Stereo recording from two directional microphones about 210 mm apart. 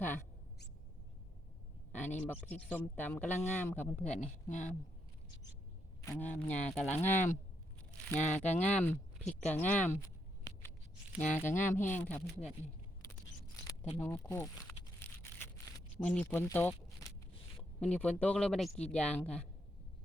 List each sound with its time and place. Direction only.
0.0 s a sound: 10° left (ahead or behind)
2.1 s speech: 10° left (ahead or behind)
4.0 s speech: 30° left (ahead or behind)
6.1 s speech: 10° left (ahead or behind)
11.2 s speech: 10° left (ahead or behind)
14.0 s speech: 10° left (ahead or behind)
15.2 s a sound: 10° left (ahead or behind)
16.2 s speech: 10° left (ahead or behind)